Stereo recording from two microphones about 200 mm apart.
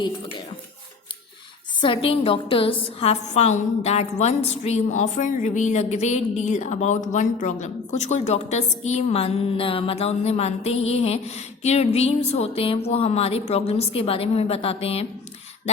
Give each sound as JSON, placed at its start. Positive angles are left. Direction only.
{"t": 1.8, "sound": "a woman's voice", "side_deg": 25}